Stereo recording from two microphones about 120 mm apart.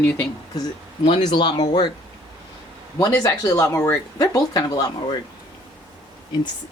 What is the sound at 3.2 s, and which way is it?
Speech, 30° left (ahead or behind).